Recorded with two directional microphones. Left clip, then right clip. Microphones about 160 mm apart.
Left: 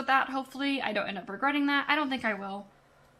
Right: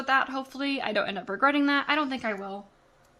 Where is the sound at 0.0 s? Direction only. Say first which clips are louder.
Right 1 dB; 25° right (ahead or behind).